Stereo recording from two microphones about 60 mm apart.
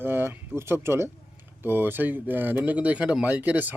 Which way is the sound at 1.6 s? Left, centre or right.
Right.